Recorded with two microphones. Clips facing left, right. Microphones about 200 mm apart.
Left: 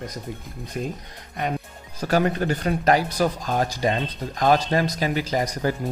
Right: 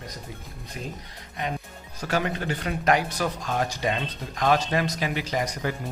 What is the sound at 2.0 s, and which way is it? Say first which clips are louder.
Speech: left 6 dB; 40° left (ahead or behind).